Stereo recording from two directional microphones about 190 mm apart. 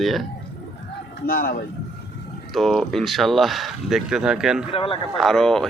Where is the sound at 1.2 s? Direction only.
50° left (ahead or behind).